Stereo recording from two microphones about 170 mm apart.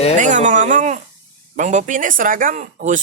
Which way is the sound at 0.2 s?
45° right (ahead or behind).